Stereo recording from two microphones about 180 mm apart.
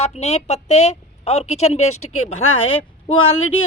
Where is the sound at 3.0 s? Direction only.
30° left (ahead or behind).